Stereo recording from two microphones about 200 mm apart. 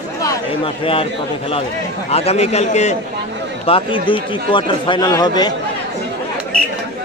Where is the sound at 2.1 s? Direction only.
30° left (ahead or behind).